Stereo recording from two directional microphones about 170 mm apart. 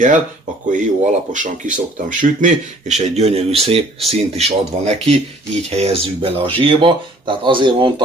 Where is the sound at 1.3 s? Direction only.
50° right (ahead or behind).